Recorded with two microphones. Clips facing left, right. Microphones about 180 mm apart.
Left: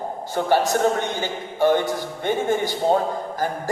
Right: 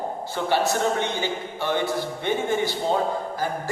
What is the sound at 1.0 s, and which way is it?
Speech, 45° left (ahead or behind).